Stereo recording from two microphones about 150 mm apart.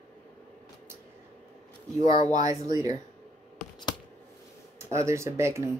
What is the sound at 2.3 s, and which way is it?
Speech, 25° right (ahead or behind).